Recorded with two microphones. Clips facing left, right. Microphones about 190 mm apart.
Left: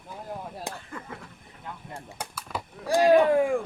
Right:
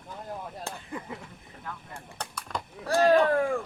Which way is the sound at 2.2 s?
5° left (ahead or behind).